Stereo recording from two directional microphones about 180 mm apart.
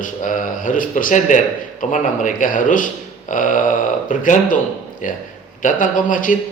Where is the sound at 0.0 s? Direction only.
45° left (ahead or behind).